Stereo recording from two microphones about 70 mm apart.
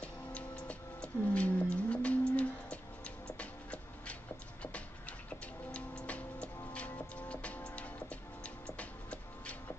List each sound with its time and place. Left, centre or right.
0.0 s music: centre
5.7 s music: centre
8.6 s a sound: centre